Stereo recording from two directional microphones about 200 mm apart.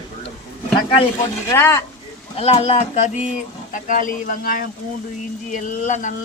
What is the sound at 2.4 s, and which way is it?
Speech, 30° left (ahead or behind).